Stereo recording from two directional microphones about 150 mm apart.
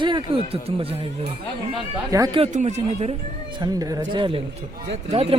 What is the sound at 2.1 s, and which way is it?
Speech, 20° right (ahead or behind).